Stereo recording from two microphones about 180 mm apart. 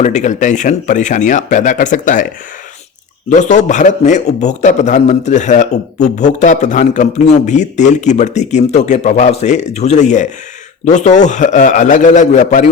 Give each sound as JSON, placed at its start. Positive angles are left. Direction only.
{"t": 0.0, "sound": "speech", "side_deg": 40}
{"t": 3.2, "sound": "a man's voice", "side_deg": 40}